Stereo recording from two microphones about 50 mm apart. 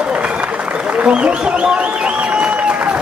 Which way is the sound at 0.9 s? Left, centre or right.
Right.